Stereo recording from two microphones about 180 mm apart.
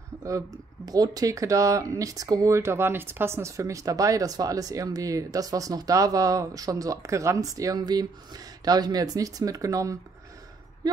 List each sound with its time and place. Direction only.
0.2 s speech: 20° right (ahead or behind)